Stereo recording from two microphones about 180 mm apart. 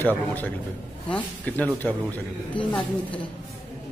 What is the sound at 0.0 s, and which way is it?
Speech, 10° left (ahead or behind).